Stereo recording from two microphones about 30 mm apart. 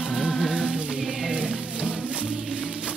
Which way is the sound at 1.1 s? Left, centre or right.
Centre.